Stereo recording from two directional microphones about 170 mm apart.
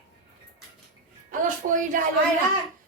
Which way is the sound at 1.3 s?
50° right (ahead or behind).